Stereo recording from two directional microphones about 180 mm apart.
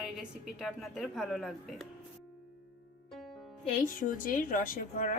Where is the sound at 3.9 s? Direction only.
50° left (ahead or behind).